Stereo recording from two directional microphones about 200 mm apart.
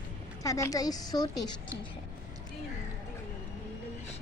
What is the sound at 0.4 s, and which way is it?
A woman's voice, 15° left (ahead or behind).